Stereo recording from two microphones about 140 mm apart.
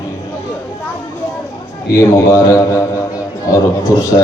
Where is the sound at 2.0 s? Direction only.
25° left (ahead or behind).